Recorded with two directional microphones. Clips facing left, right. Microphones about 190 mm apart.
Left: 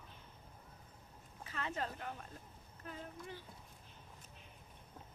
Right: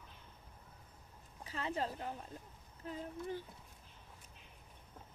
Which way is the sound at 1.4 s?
35° right (ahead or behind).